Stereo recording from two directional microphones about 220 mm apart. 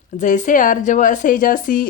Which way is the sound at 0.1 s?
35° left (ahead or behind).